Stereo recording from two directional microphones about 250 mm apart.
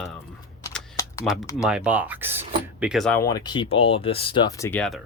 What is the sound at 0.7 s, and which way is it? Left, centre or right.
Typing, centre.